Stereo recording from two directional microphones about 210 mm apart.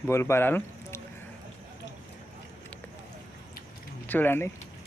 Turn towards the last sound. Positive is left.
turn(degrees=10)  # may be behind; listen again after turning